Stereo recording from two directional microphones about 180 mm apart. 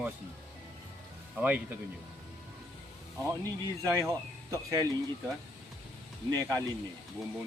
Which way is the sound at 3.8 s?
15° right (ahead or behind).